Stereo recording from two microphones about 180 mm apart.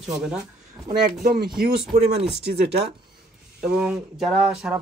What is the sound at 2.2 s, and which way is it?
Speech, 65° right (ahead or behind).